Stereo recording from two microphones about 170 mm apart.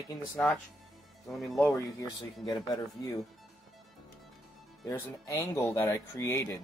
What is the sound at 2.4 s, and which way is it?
Speech, 20° left (ahead or behind).